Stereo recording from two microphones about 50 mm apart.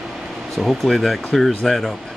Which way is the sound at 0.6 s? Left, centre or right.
Centre.